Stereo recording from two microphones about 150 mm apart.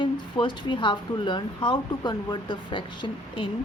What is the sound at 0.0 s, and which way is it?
Speech, 35° left (ahead or behind).